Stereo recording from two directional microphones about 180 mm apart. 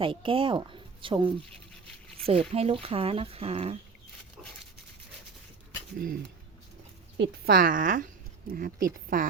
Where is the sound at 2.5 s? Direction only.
35° right (ahead or behind).